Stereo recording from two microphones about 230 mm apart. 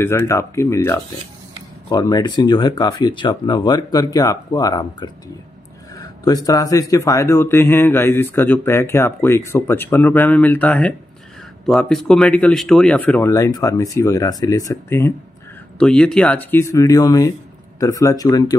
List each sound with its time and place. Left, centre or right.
0.0 s speech: centre